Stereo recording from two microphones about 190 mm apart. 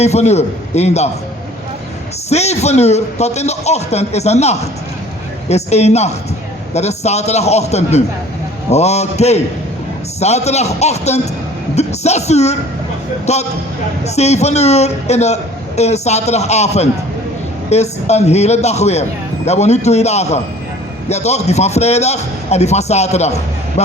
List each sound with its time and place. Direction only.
0.0 s a man's voice: 35° left (ahead or behind)
2.3 s a man's voice: 35° left (ahead or behind)